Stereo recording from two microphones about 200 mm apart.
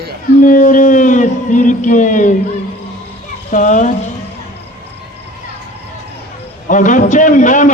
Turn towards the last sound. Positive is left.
turn(degrees=40)  # may be behind; listen again after turning